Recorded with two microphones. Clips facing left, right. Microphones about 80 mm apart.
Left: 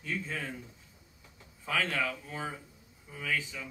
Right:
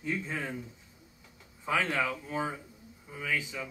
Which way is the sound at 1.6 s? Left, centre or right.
Centre.